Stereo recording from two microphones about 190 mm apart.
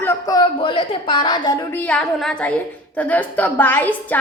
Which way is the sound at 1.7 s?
5° left (ahead or behind).